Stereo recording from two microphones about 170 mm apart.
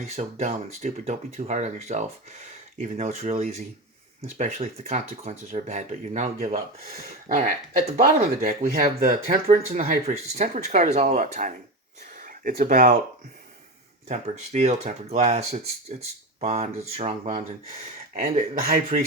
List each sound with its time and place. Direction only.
0.0 s speech: 40° right (ahead or behind); by 9.1 s 60° right (ahead or behind)
9.2 s speech: 50° right (ahead or behind)
14.1 s speech: 40° right (ahead or behind)
18.7 s speech: 40° right (ahead or behind)